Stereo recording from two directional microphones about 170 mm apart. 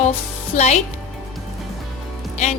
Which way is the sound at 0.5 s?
40° left (ahead or behind).